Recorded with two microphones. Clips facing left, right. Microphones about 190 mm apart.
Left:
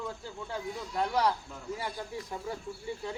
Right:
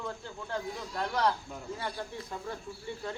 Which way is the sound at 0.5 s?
10° left (ahead or behind).